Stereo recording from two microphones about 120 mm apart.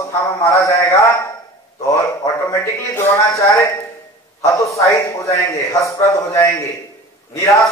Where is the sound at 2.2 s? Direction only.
35° left (ahead or behind).